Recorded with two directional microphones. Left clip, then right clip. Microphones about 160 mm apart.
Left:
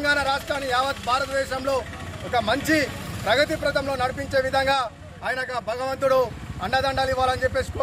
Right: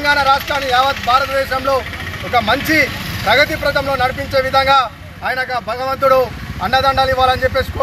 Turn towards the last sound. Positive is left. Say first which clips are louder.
# right 9 dB
turn(degrees=35)  # may be behind; listen again after turning